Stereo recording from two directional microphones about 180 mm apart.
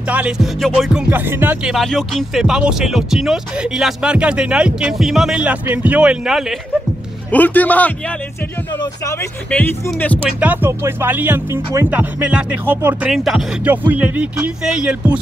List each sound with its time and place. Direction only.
0.1 s speech: 10° right (ahead or behind)
7.2 s speech: 10° left (ahead or behind)
8.7 s speech: 20° left (ahead or behind)
9.5 s speech: 10° left (ahead or behind)
10.4 s speech: 10° right (ahead or behind)